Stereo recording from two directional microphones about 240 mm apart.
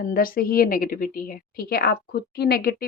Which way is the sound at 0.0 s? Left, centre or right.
Left.